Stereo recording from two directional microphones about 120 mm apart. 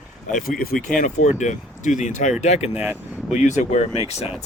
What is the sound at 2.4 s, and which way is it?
Speech, 70° left (ahead or behind).